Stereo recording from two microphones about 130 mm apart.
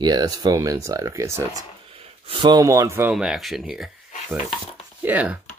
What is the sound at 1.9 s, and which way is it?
Speech, 45° right (ahead or behind).